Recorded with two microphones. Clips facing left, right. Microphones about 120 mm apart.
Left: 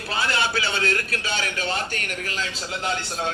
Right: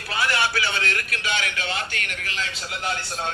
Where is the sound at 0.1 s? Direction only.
25° left (ahead or behind).